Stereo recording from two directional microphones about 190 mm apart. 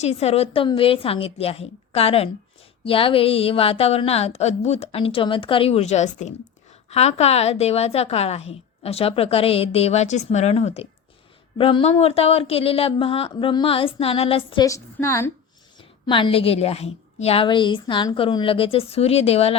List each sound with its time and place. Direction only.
0.0 s a woman's voice: 35° left (ahead or behind); by 15.3 s 15° left (ahead or behind)
15.8 s a woman's voice: 25° left (ahead or behind)